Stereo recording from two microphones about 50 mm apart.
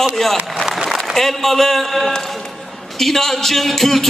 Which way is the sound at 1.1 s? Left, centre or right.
Centre.